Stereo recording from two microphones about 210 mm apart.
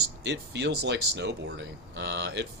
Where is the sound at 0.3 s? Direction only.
55° right (ahead or behind).